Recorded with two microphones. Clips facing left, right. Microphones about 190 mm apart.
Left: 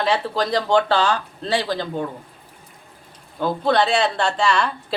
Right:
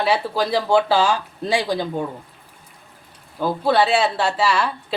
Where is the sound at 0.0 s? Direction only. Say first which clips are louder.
Right 1 dB; 10° right (ahead or behind).